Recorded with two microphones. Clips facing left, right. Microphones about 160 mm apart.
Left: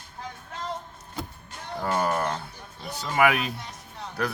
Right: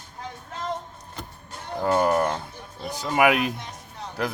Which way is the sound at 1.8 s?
15° right (ahead or behind).